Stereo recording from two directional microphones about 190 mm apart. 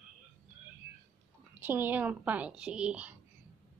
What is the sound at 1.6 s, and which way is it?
A woman's voice, 10° right (ahead or behind).